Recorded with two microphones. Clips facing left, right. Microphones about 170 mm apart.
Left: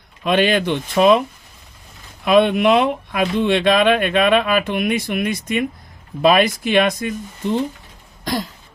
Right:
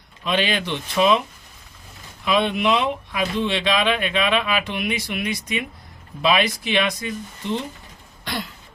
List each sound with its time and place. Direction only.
0.3 s speech: 50° left (ahead or behind)
2.2 s speech: 50° left (ahead or behind)
8.2 s throat clearing: 40° left (ahead or behind)